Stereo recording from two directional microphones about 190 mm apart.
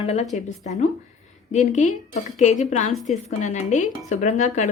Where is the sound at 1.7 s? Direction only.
40° left (ahead or behind).